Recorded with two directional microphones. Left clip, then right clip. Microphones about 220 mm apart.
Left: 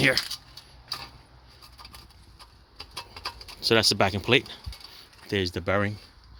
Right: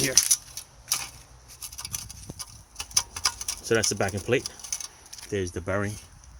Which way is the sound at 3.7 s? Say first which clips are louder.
Left 4 dB; 15° left (ahead or behind).